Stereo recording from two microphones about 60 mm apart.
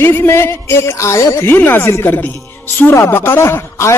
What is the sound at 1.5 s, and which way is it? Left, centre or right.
Speech, left.